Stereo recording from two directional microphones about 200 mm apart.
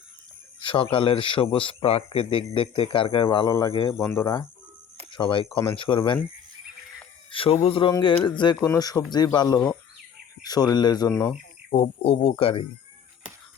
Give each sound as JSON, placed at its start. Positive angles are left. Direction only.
{"t": 0.6, "sound": "speech", "side_deg": 25}
{"t": 4.0, "sound": "speech", "side_deg": 10}
{"t": 5.1, "sound": "speech", "side_deg": 25}
{"t": 7.3, "sound": "speech", "side_deg": 25}
{"t": 11.3, "sound": "speech", "side_deg": 30}